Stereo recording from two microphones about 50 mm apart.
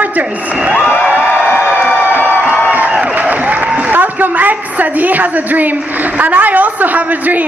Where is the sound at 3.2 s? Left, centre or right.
Right.